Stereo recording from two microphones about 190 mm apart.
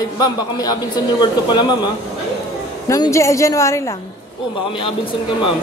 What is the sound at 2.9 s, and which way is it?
Speech, 15° left (ahead or behind).